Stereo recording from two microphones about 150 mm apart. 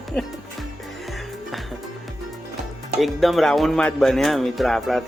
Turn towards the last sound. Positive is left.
turn(degrees=0)  # may be behind; listen again after turning